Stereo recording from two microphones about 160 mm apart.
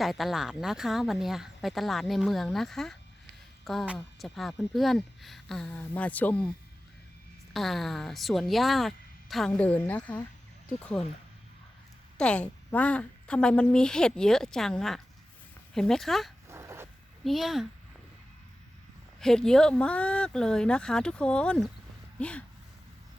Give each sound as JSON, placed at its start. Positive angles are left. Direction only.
{"t": 0.0, "sound": "speech", "side_deg": 0}
{"t": 7.5, "sound": "speech", "side_deg": 0}
{"t": 12.1, "sound": "speech", "side_deg": 5}
{"t": 16.5, "sound": "a sound", "side_deg": -15}
{"t": 17.2, "sound": "speech", "side_deg": 0}
{"t": 19.2, "sound": "speech", "side_deg": 5}